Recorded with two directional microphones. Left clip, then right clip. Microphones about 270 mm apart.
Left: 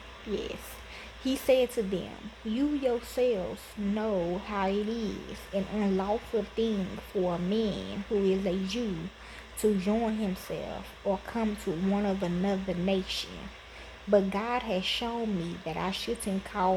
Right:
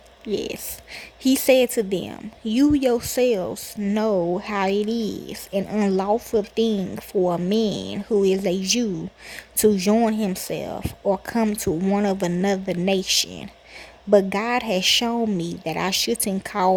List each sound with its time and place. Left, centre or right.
0.3 s speech: right